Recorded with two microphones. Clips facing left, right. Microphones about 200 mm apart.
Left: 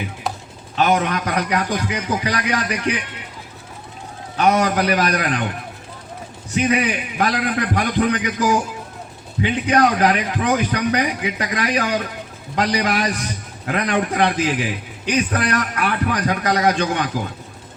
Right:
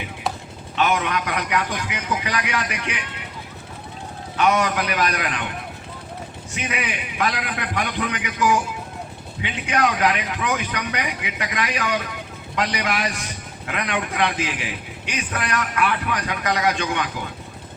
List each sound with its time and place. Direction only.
0.8 s a man's voice: 40° left (ahead or behind)
4.4 s a man's voice: 35° left (ahead or behind)
6.6 s a man's voice: 35° left (ahead or behind)